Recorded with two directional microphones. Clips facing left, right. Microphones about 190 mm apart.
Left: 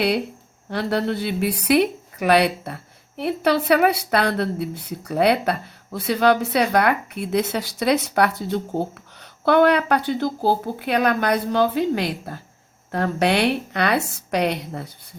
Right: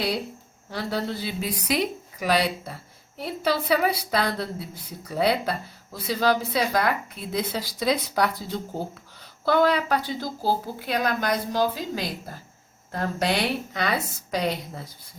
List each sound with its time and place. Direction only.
0.7 s a woman's voice: 65° left (ahead or behind)
9.4 s a woman's voice: 60° left (ahead or behind)